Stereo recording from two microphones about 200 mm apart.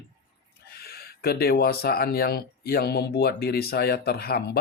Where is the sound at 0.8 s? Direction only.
50° left (ahead or behind).